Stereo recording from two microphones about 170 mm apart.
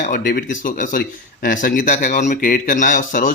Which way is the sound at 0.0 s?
55° left (ahead or behind).